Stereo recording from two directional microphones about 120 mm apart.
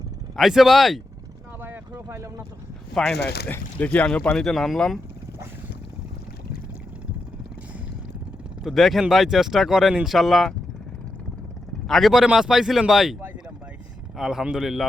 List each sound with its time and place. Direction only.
0.3 s speech: 5° right (ahead or behind)
1.9 s vehicle: 25° right (ahead or behind)
2.9 s speech: 5° left (ahead or behind)
8.6 s speech: centre (ahead or behind)
11.9 s speech: centre (ahead or behind)
14.2 s speech: 5° right (ahead or behind)